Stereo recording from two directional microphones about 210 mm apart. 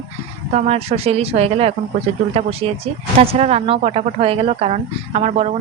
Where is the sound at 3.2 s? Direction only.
30° right (ahead or behind).